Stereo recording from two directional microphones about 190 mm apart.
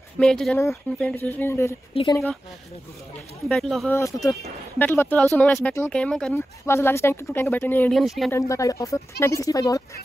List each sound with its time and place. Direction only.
0.2 s speech: 5° left (ahead or behind); by 2.2 s 20° left (ahead or behind)
3.4 s speech: 5° left (ahead or behind)
6.6 s speech: 15° left (ahead or behind)
8.3 s speech: 15° left (ahead or behind)